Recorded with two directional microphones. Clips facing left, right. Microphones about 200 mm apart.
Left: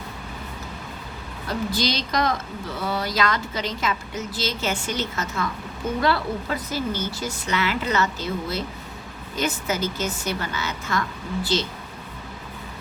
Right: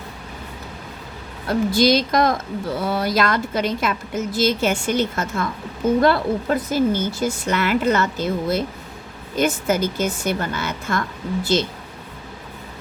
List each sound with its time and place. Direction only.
1.5 s a woman's voice: 50° right (ahead or behind)